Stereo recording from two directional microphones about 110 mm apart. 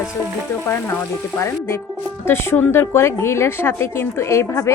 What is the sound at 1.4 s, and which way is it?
A woman's voice, 20° left (ahead or behind).